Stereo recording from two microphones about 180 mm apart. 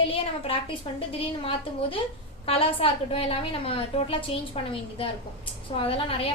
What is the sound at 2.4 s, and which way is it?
A woman's voice, 30° left (ahead or behind).